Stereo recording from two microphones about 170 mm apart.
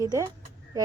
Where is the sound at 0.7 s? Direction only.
20° right (ahead or behind).